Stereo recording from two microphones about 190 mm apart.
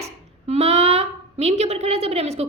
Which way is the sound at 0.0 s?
35° right (ahead or behind).